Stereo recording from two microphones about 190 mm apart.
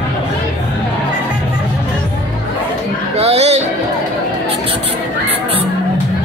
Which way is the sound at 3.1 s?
35° right (ahead or behind).